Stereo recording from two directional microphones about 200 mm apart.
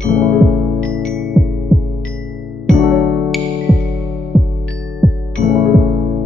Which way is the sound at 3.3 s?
Centre (ahead or behind).